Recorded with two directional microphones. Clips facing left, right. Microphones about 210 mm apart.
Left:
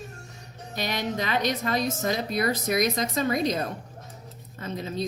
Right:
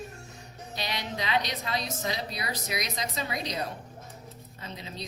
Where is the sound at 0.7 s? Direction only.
50° left (ahead or behind).